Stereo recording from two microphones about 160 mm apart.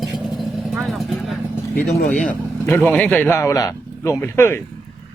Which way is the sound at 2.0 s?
55° left (ahead or behind).